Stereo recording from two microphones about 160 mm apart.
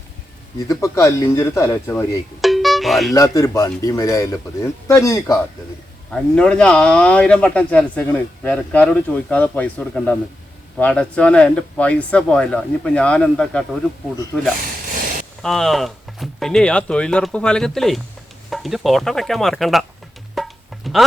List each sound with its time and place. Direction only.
0.7 s a man's voice: 20° left (ahead or behind)
2.4 s music: centre (ahead or behind)
3.2 s speech: 20° left (ahead or behind)
6.1 s a man's voice: 5° left (ahead or behind)
15.4 s speech: centre (ahead or behind)
20.3 s music: centre (ahead or behind)